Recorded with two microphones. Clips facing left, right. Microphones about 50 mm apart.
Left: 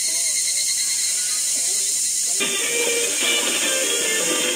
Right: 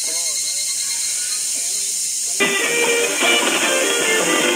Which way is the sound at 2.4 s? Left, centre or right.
Right.